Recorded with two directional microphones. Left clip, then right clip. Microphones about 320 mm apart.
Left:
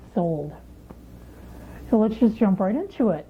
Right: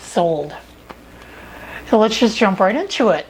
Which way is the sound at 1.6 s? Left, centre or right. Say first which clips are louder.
Right 8 dB; centre.